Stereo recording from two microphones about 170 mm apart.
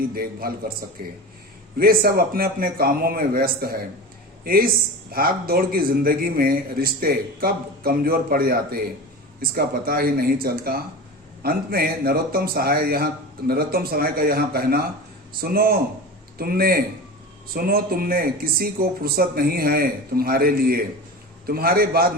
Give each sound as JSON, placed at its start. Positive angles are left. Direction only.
{"t": 0.0, "sound": "a man's voice", "side_deg": -60}